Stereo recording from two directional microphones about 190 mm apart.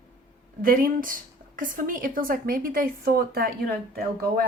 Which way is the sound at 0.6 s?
50° right (ahead or behind).